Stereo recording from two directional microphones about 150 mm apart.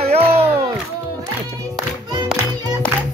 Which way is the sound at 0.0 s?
45° right (ahead or behind).